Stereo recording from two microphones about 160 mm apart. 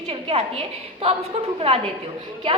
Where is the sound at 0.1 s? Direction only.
40° right (ahead or behind).